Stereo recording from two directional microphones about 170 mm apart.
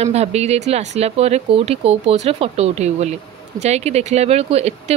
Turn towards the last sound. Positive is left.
turn(degrees=-35)  # may be behind; listen again after turning